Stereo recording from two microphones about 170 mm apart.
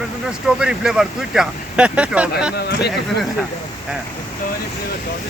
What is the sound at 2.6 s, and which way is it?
Speech, 70° left (ahead or behind).